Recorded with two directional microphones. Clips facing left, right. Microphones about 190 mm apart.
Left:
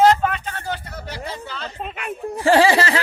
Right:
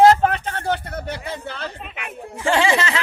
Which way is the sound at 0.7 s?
55° right (ahead or behind).